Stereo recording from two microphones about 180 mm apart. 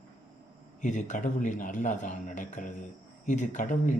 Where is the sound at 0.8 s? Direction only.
45° left (ahead or behind).